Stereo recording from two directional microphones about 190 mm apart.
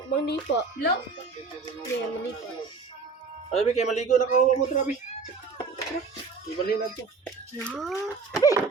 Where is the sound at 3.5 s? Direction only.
35° left (ahead or behind).